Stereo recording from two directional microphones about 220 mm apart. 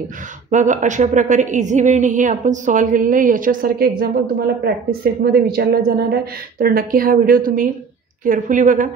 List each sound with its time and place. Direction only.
0.5 s a woman's voice: 35° right (ahead or behind)